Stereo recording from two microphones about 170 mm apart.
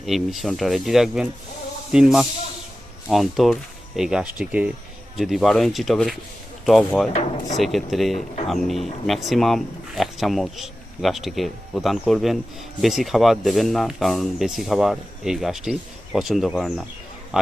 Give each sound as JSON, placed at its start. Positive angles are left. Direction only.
{"t": 0.0, "sound": "speech", "side_deg": 0}
{"t": 7.1, "sound": "drawer open or close", "side_deg": 45}
{"t": 7.5, "sound": "speech", "side_deg": 0}